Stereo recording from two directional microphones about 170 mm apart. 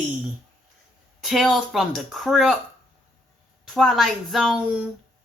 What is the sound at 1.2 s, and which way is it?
Speech, centre (ahead or behind).